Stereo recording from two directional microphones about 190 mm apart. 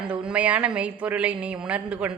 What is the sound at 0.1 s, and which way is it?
A woman's voice, 5° right (ahead or behind).